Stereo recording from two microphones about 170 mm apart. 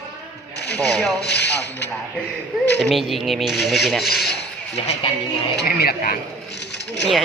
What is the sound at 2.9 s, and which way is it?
Speech, centre (ahead or behind).